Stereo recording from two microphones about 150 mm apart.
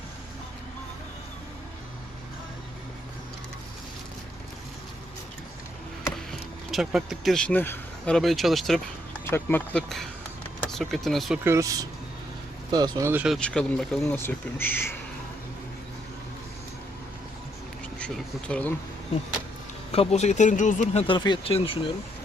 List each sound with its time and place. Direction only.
6.7 s speech: centre (ahead or behind); by 8.1 s 15° left (ahead or behind)
8.1 s speech: centre (ahead or behind)
9.2 s speech: 15° left (ahead or behind)
10.6 s speech: centre (ahead or behind)
11.4 s speech: 20° right (ahead or behind)
13.1 s speech: 10° right (ahead or behind)
13.3 s speech: 5° left (ahead or behind)
18.0 s speech: 10° left (ahead or behind)
19.9 s speech: 45° left (ahead or behind)
21.1 s speech: 35° left (ahead or behind)